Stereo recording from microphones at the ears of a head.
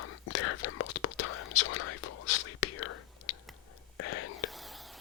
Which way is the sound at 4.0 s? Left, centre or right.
Left.